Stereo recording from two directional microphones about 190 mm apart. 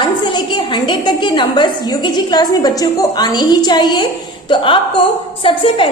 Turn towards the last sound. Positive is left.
turn(degrees=25)  # may be behind; listen again after turning